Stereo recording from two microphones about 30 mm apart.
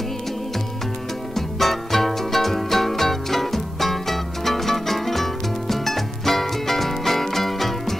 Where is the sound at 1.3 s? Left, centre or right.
Centre.